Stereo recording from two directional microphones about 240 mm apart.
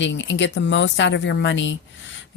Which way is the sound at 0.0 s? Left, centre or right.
Left.